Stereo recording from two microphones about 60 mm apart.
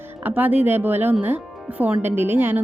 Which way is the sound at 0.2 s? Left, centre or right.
Right.